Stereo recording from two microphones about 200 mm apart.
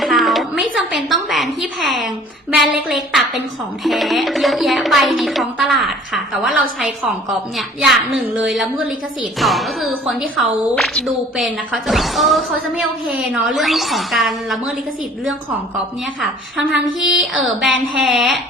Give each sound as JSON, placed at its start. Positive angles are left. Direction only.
{"t": 0.0, "sound": "a sound", "side_deg": 0}
{"t": 0.9, "sound": "speech", "side_deg": 0}
{"t": 17.0, "sound": "speech", "side_deg": 0}